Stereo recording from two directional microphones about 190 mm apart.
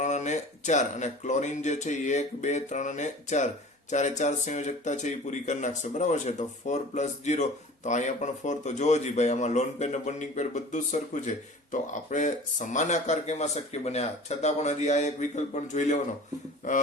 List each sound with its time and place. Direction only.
0.0 s speech: 40° left (ahead or behind)